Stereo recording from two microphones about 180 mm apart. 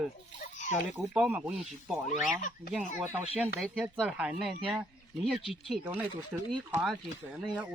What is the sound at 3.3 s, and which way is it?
Speech, 5° right (ahead or behind).